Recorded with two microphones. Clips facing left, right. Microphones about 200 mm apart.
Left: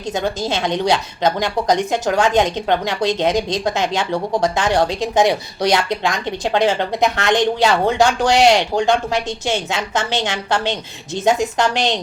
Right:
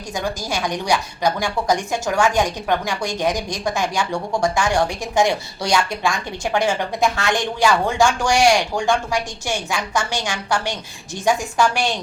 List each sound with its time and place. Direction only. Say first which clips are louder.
0.1 s a woman's voice: left 4 dB; 20° left (ahead or behind)